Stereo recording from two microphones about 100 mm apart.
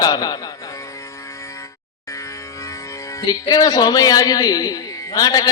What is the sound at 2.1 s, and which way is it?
A man's voice, 30° left (ahead or behind).